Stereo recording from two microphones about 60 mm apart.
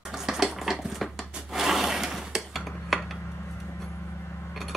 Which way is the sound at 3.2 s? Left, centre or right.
Left.